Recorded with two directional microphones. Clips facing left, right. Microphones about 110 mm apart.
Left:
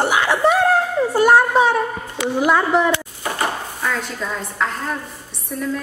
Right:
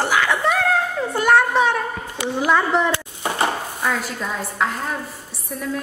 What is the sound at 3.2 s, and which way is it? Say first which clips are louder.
Dishes: right 1 dB; 25° right (ahead or behind).